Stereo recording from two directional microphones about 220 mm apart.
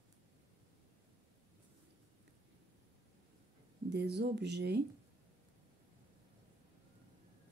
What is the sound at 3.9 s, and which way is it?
Speech, 50° right (ahead or behind).